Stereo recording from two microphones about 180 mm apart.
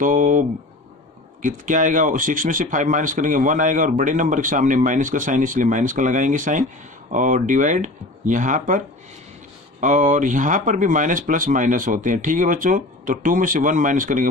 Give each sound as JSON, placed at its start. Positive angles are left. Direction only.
{"t": 0.0, "sound": "speech", "side_deg": -45}